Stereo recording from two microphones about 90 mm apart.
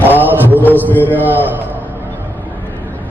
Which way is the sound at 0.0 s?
20° right (ahead or behind).